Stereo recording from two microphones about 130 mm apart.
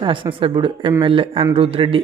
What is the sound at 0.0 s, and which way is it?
A man's voice, 40° right (ahead or behind).